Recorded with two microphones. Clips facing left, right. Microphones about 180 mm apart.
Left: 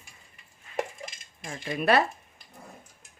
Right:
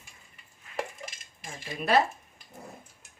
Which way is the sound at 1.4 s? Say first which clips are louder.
Left 6 dB; 65° left (ahead or behind).